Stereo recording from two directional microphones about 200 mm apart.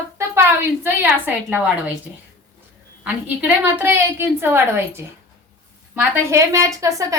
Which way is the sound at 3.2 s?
10° right (ahead or behind).